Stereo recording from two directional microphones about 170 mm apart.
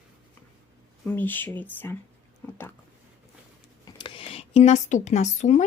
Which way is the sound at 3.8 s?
30° left (ahead or behind).